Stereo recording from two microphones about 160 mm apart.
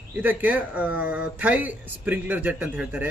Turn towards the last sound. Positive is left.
turn(degrees=-10)  # may be behind; listen again after turning